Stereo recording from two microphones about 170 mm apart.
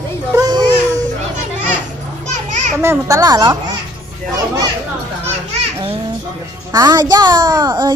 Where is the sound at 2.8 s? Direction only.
15° right (ahead or behind).